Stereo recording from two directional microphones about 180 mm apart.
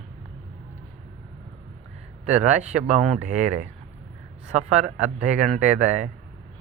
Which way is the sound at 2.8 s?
40° right (ahead or behind).